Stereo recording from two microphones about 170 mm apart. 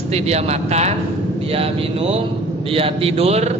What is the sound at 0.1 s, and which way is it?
A man's voice, 40° right (ahead or behind).